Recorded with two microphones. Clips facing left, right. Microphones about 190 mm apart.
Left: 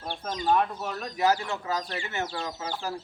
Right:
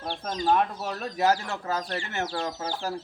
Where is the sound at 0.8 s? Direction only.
45° right (ahead or behind).